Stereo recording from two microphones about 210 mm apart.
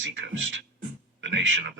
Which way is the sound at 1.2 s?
65° right (ahead or behind).